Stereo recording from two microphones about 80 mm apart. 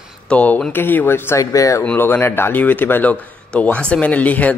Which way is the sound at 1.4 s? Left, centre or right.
Left.